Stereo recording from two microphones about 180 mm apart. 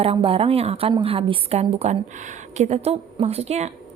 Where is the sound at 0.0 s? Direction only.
30° right (ahead or behind).